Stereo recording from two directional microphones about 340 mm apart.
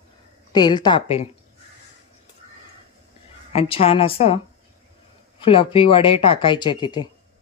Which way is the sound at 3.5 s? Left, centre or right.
Centre.